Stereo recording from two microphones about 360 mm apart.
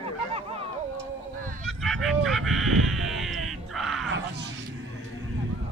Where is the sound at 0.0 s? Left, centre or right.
Centre.